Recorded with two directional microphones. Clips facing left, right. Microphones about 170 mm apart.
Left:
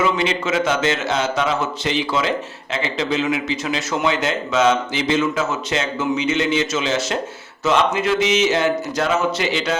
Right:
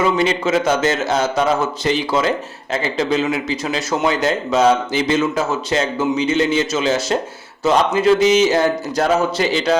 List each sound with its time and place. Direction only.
0.0 s speech: 40° right (ahead or behind)